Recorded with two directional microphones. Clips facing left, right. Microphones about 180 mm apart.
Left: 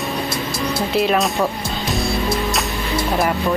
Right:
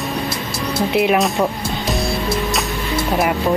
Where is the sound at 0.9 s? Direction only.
15° right (ahead or behind).